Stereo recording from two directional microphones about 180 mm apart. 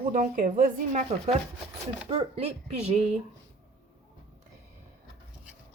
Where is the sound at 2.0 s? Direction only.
30° right (ahead or behind).